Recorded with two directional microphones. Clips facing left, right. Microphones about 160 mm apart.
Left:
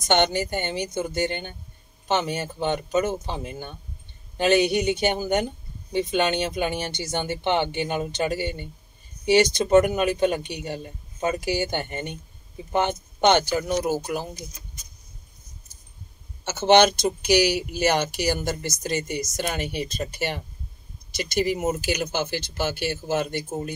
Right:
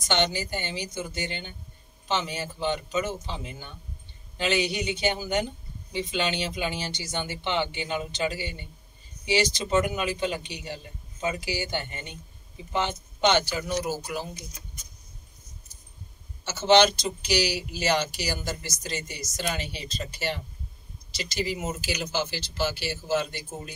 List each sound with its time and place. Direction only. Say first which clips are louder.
0.1 s a man's voice: left 5 dB; 55° left (ahead or behind)
16.4 s a man's voice: left 3 dB; 55° left (ahead or behind)